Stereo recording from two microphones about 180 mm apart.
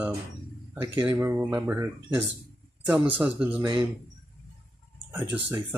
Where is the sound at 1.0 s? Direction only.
20° right (ahead or behind).